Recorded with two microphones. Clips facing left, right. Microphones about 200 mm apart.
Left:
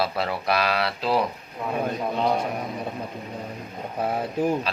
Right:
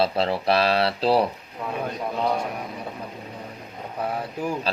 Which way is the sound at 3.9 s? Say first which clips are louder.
Left 3 dB; 25° left (ahead or behind).